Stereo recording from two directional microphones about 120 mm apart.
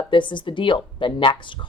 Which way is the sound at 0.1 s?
40° left (ahead or behind).